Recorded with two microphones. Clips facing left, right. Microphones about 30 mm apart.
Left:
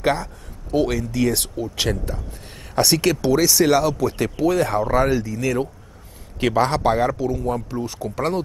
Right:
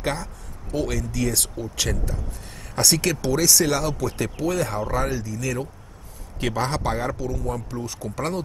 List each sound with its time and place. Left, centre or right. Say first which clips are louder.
0.0 s speech: left 6 dB; left